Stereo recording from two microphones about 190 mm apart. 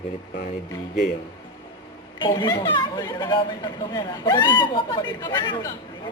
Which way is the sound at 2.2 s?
20° left (ahead or behind).